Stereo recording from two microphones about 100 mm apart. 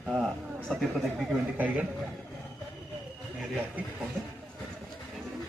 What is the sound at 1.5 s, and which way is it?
Speech, 15° right (ahead or behind).